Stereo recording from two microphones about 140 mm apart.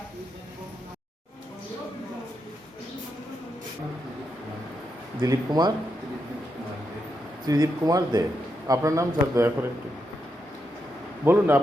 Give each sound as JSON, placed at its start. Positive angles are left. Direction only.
{"t": 5.2, "sound": "a man's voice", "side_deg": -25}
{"t": 7.4, "sound": "a man's voice", "side_deg": -25}
{"t": 11.3, "sound": "a man's voice", "side_deg": -15}